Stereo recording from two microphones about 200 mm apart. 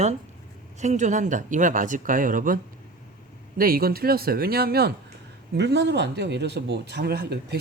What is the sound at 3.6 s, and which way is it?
Speech, 45° right (ahead or behind).